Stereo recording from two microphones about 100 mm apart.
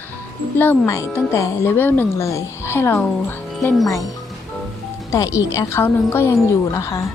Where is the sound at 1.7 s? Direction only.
20° left (ahead or behind).